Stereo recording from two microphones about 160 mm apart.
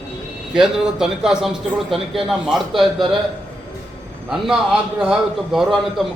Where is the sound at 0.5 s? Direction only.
5° right (ahead or behind).